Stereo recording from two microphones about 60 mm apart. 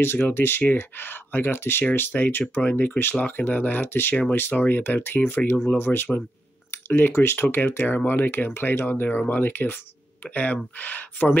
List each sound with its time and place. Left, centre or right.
0.0 s speech: left